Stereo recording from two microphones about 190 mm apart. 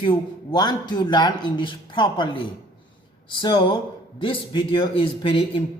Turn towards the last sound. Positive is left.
turn(degrees=25)  # may be behind; listen again after turning